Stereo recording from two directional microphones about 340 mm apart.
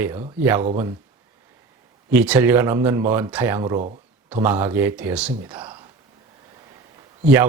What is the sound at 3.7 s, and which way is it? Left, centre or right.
Speech, right.